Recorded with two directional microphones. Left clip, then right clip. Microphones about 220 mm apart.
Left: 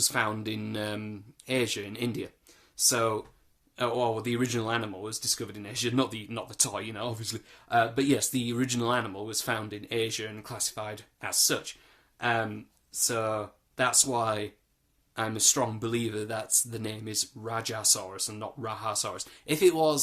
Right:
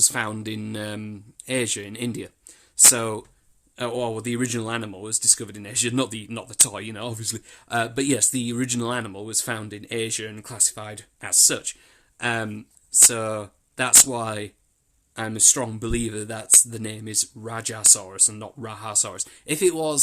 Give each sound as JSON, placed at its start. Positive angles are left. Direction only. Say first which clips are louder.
{"t": 0.0, "sound": "speech", "louder": "right 3 dB", "side_deg": -35}